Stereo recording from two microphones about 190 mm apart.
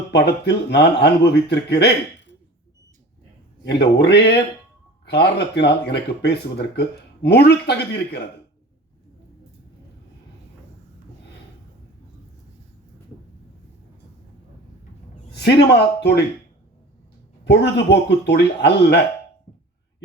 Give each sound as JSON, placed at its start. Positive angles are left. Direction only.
{"t": 0.1, "sound": "speech", "side_deg": 60}
{"t": 3.6, "sound": "speech", "side_deg": 60}
{"t": 15.3, "sound": "speech", "side_deg": 60}
{"t": 17.4, "sound": "speech", "side_deg": 60}